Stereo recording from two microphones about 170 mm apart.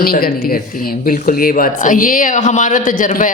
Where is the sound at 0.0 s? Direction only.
60° left (ahead or behind).